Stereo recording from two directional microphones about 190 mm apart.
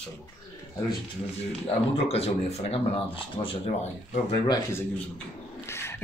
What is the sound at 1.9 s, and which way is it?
A man's voice, 30° left (ahead or behind).